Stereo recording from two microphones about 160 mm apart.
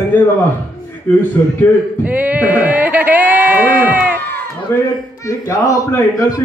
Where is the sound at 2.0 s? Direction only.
10° right (ahead or behind).